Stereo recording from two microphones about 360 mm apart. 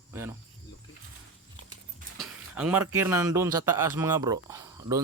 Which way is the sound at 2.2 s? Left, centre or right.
Centre.